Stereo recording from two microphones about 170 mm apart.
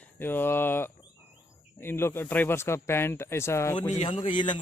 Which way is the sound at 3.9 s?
35° left (ahead or behind).